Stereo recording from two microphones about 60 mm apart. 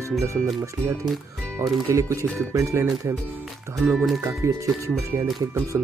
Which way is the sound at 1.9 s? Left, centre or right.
Right.